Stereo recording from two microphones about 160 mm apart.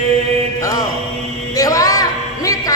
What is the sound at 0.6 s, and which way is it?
Mantra, 20° left (ahead or behind).